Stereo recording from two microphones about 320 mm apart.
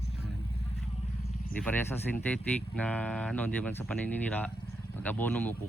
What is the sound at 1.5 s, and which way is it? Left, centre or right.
A man's voice, centre.